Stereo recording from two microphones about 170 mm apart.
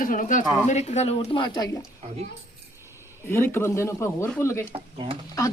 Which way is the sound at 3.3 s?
15° left (ahead or behind).